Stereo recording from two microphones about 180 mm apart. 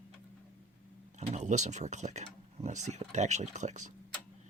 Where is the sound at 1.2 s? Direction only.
40° right (ahead or behind).